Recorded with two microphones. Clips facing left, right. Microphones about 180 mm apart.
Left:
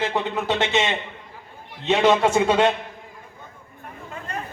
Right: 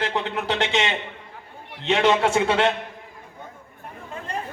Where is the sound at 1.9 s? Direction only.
10° left (ahead or behind).